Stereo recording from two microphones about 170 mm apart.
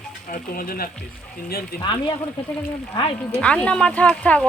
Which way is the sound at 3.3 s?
5° left (ahead or behind).